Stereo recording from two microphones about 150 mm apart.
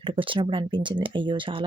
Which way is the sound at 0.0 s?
35° right (ahead or behind).